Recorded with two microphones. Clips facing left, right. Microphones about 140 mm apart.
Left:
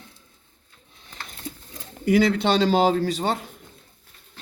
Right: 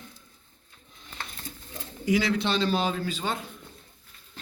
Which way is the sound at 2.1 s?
55° left (ahead or behind).